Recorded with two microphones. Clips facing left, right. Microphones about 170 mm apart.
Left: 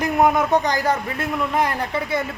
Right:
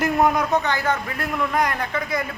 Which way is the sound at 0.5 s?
35° left (ahead or behind).